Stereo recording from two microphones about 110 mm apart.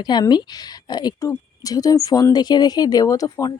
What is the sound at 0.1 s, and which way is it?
Speech, 40° left (ahead or behind).